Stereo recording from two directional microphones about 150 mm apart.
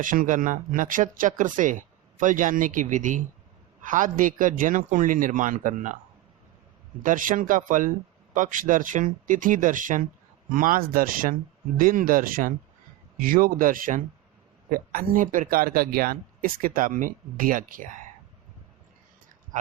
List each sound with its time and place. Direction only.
0.0 s speech: 60° right (ahead or behind)
7.0 s speech: 60° right (ahead or behind)